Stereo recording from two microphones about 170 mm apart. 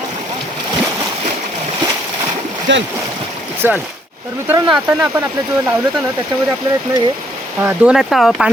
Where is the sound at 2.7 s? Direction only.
90° right.